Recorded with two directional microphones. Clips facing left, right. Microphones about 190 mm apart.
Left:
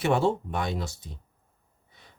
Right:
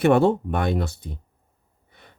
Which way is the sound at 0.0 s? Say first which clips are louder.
Right 7 dB; 60° right (ahead or behind).